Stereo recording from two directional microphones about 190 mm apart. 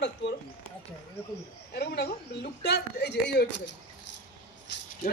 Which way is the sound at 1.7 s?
60° left (ahead or behind).